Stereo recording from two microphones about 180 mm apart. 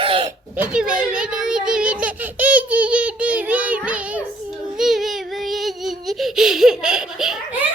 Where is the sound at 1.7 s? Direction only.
5° right (ahead or behind).